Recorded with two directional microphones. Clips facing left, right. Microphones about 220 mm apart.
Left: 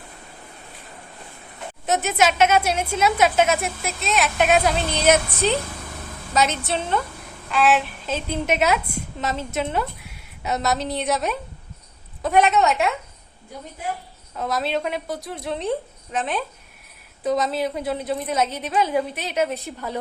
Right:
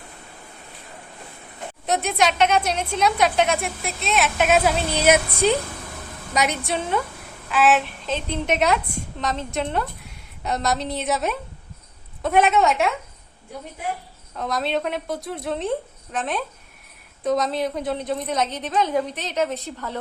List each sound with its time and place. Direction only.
1.9 s a woman's voice: centre (ahead or behind)
14.3 s a woman's voice: 5° left (ahead or behind)